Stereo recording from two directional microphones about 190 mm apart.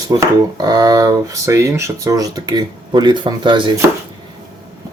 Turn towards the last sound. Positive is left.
turn(degrees=-25)  # may be behind; listen again after turning